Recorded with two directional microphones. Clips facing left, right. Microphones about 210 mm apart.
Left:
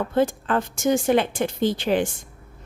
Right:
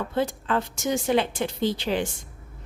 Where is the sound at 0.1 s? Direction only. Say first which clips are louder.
Left 4 dB; 50° left (ahead or behind).